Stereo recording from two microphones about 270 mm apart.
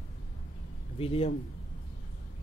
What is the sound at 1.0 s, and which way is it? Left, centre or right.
Speech, left.